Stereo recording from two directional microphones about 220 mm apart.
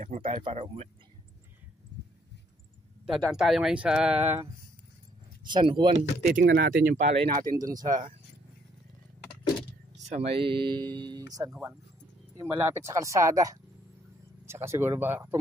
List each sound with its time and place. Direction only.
0.0 s speech: 25° right (ahead or behind)
3.3 s speech: centre (ahead or behind)
5.5 s speech: 20° right (ahead or behind)
6.3 s speech: 40° right (ahead or behind)
7.5 s speech: 15° right (ahead or behind)
10.0 s speech: 30° right (ahead or behind); by 15.3 s 10° right (ahead or behind)